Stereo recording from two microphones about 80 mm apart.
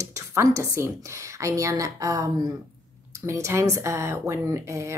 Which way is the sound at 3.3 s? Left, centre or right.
Right.